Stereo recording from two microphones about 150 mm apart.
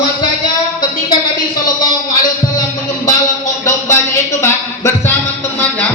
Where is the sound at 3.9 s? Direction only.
20° left (ahead or behind).